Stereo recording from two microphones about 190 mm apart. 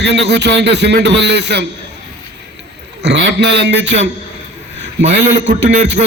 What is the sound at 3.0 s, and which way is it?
Speech, 65° right (ahead or behind).